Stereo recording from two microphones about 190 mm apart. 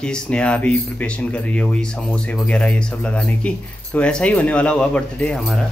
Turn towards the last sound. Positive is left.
turn(degrees=5)  # may be behind; listen again after turning